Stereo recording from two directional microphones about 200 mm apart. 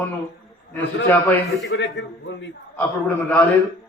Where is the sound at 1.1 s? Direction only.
10° left (ahead or behind).